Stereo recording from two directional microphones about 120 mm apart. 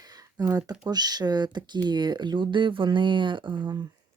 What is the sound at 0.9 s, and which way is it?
Speech, 35° right (ahead or behind).